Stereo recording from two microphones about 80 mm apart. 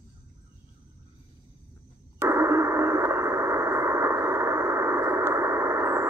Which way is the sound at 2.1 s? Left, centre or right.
Right.